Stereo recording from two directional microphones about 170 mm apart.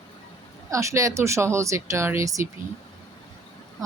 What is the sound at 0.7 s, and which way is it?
Speech, 20° right (ahead or behind).